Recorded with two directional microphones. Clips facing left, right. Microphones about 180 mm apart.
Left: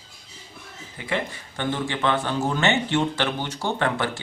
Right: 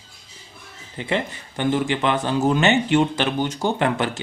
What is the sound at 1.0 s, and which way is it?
Speech, 20° right (ahead or behind).